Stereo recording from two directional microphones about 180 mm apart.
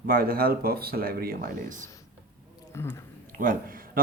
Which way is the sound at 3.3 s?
50° right (ahead or behind).